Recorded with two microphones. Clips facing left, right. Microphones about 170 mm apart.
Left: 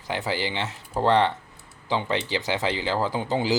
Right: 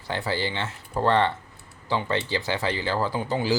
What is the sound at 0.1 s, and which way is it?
Speech, 15° left (ahead or behind).